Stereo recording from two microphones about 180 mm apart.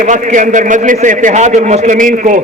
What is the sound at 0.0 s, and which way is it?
A man's voice, 45° right (ahead or behind).